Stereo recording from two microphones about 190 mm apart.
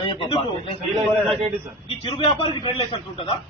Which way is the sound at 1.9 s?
25° left (ahead or behind).